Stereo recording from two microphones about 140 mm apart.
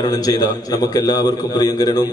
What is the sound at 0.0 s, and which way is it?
A man's voice, 30° left (ahead or behind).